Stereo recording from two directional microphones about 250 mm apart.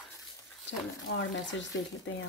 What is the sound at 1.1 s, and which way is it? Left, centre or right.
Speech, left.